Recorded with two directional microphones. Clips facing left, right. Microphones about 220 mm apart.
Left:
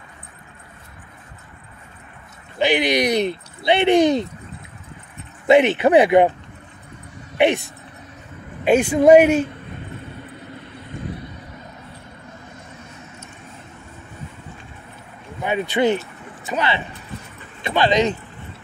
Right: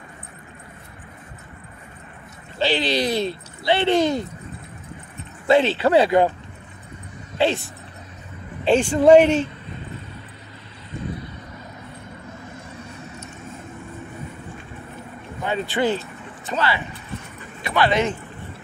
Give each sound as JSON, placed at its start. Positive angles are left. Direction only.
{"t": 2.6, "sound": "speech", "side_deg": 15}
{"t": 5.5, "sound": "speech", "side_deg": 20}
{"t": 7.3, "sound": "speech", "side_deg": 20}
{"t": 8.6, "sound": "speech", "side_deg": 10}
{"t": 15.4, "sound": "speech", "side_deg": 20}